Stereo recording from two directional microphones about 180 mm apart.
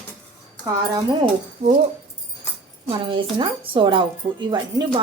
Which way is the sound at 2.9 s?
30° right (ahead or behind).